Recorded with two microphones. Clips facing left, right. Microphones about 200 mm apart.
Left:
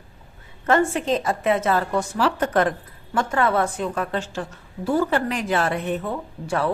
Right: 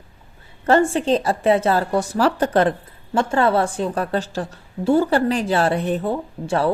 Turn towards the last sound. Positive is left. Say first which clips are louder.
# right 3 dB
turn(degrees=-30)  # may be behind; listen again after turning